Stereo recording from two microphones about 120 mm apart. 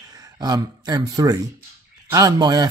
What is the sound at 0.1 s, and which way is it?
Speech, 35° right (ahead or behind).